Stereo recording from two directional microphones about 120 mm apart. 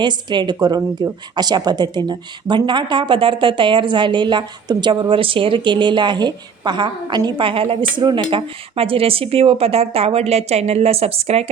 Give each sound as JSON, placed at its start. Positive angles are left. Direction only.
{"t": 0.0, "sound": "speech", "side_deg": -40}